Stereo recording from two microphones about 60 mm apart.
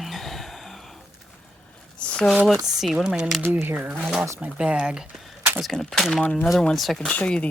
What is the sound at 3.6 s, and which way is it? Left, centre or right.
Speech, right.